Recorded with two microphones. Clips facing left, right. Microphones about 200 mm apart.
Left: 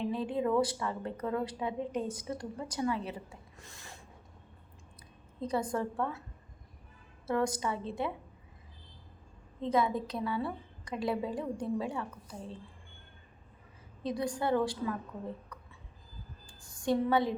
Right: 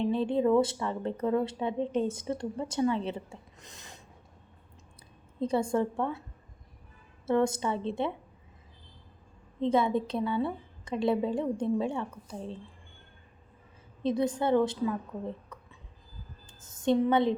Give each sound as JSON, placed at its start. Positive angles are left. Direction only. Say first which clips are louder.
{"t": 0.0, "sound": "a woman's voice", "louder": "right 5 dB", "side_deg": -25}
{"t": 5.4, "sound": "a woman's voice", "louder": "right 5 dB", "side_deg": -30}
{"t": 7.3, "sound": "a woman's voice", "louder": "right 5 dB", "side_deg": -25}
{"t": 9.6, "sound": "a woman's voice", "louder": "right 4 dB", "side_deg": -25}
{"t": 14.0, "sound": "a woman's voice", "louder": "right 5 dB", "side_deg": -25}
{"t": 15.5, "sound": "a sound", "louder": "right 2 dB", "side_deg": -25}
{"t": 16.5, "sound": "a woman's voice", "louder": "right 4 dB", "side_deg": -20}